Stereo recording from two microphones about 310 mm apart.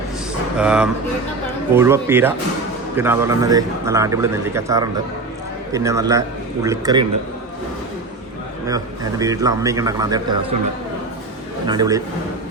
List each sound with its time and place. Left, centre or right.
0.5 s a man's voice: centre
8.6 s a man's voice: centre
11.6 s a man's voice: centre